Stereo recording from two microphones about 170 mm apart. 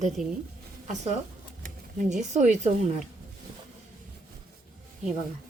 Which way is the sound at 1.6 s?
50° right (ahead or behind).